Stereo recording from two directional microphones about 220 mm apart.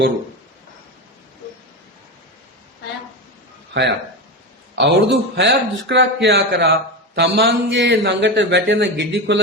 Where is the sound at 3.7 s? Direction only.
50° right (ahead or behind).